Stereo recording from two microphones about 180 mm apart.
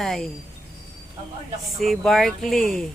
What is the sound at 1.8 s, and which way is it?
A woman's voice, centre (ahead or behind).